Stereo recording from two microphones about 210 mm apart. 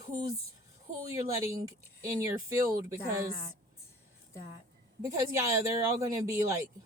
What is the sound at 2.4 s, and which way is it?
Speech, 15° right (ahead or behind).